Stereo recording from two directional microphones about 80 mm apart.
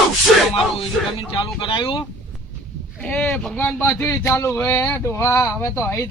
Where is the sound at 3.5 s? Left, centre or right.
Centre.